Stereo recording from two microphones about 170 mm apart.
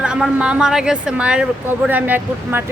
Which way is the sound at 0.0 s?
5° right (ahead or behind).